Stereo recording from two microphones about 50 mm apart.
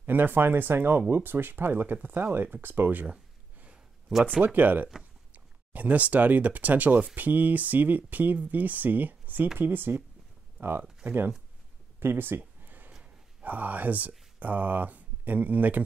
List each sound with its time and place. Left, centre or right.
0.0 s speech: right
4.4 s speech: right
12.0 s a sound: right
13.0 s speech: right